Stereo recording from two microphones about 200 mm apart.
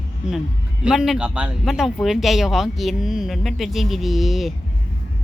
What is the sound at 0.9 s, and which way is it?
Speech, centre (ahead or behind).